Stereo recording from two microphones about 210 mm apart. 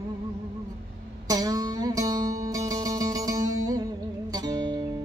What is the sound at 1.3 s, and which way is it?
Music, 15° right (ahead or behind).